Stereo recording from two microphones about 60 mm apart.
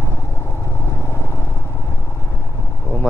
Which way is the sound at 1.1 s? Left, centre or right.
Left.